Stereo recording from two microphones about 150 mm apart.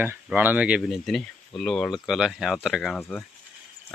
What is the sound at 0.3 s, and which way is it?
Speech, 10° right (ahead or behind).